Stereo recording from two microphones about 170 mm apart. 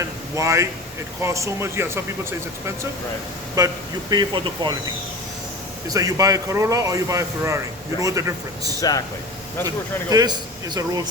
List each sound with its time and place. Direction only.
0.0 s speech: 20° right (ahead or behind)
3.6 s a man's voice: 20° right (ahead or behind)
5.9 s a man's voice: 20° right (ahead or behind)
8.8 s speech: 20° left (ahead or behind)
9.6 s a man's voice: 20° right (ahead or behind)